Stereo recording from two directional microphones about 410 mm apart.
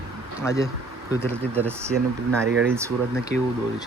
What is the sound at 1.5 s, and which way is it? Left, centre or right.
Speech, centre.